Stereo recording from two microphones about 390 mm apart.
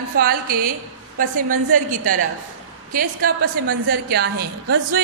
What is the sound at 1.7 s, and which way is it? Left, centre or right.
Speech, centre.